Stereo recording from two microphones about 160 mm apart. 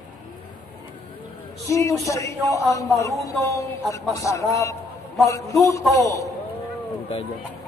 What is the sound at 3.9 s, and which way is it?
Speech, 20° left (ahead or behind).